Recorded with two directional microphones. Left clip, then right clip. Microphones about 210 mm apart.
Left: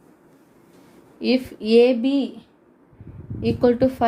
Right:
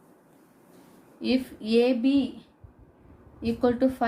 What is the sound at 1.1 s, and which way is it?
A woman's voice, 30° left (ahead or behind).